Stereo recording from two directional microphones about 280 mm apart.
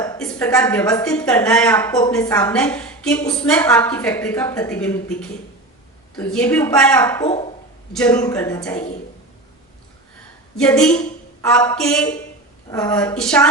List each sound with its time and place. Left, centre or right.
0.2 s a woman's voice: centre
7.3 s speech: left
7.9 s speech: centre
10.6 s a woman's voice: centre